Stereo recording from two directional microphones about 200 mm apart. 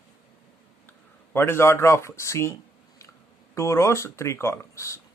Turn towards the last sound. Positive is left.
turn(degrees=15)  # may be behind; listen again after turning